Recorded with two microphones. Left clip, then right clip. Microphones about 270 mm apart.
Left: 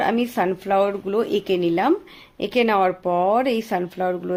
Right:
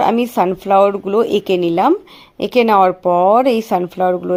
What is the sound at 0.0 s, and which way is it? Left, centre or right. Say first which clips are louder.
Speech: right 7 dB; right.